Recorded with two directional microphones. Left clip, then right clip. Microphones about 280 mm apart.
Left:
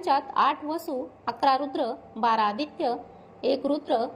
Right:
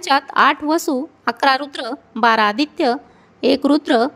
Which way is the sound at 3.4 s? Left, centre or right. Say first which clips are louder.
Right 10 dB; right.